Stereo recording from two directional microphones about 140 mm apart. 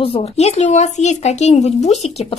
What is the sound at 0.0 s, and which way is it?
Speech, 45° left (ahead or behind).